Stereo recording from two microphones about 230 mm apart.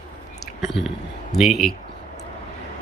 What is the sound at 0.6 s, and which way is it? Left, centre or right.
Speech, centre.